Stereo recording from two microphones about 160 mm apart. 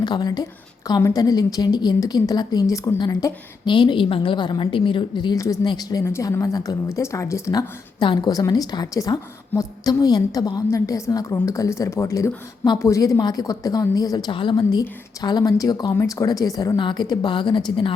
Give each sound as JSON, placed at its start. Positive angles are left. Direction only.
{"t": 0.0, "sound": "a woman's voice", "side_deg": 25}